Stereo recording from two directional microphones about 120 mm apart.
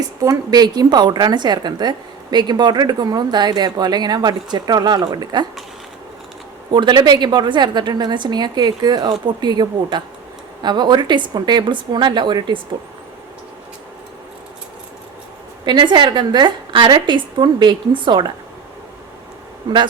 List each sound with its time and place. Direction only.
0.2 s a woman's voice: 30° right (ahead or behind)
6.7 s a woman's voice: 40° right (ahead or behind)
15.6 s a woman's voice: 40° right (ahead or behind)